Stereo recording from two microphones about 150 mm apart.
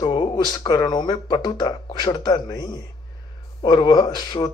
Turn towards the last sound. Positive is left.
turn(degrees=30)  # may be behind; listen again after turning